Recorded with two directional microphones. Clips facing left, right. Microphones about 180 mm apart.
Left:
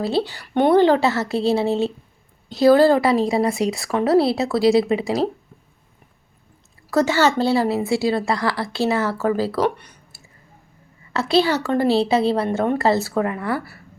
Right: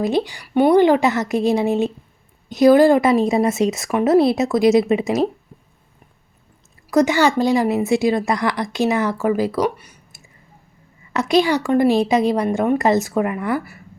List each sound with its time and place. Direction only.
0.0 s a woman's voice: 15° right (ahead or behind)
6.9 s a woman's voice: 15° right (ahead or behind)
11.1 s a woman's voice: 15° right (ahead or behind)